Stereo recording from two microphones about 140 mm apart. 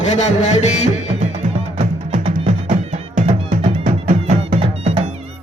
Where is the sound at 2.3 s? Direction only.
65° right (ahead or behind).